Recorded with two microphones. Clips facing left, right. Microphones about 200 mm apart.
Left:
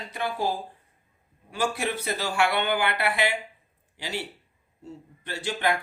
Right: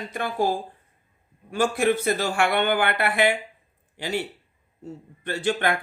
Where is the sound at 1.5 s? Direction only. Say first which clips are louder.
Right 6 dB; 50° right (ahead or behind).